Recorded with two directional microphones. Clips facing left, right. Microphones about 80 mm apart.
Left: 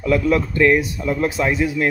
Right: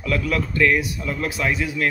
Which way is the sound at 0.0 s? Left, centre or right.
Left.